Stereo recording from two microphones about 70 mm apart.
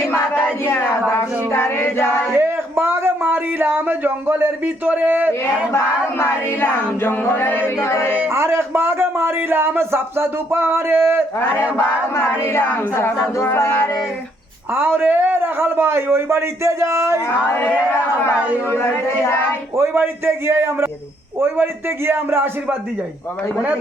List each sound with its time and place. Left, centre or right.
0.0 s a sound: left
2.3 s a sound: right
5.7 s choir: left
8.3 s speech: right
11.8 s choir: left
14.7 s speech: right
17.2 s choir: left
18.7 s choir: left
19.7 s speech: right